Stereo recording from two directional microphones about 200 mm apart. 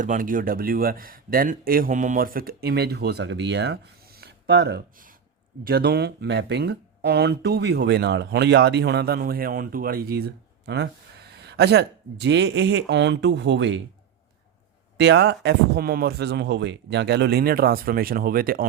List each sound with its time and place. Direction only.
0.0 s speech: 40° right (ahead or behind); by 13.7 s 60° right (ahead or behind)
14.9 s speech: 60° right (ahead or behind)